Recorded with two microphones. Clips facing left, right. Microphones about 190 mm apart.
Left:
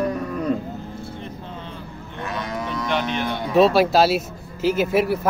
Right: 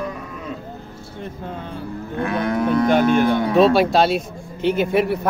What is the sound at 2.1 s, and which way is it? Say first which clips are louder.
Moo: right 7 dB; 55° right (ahead or behind).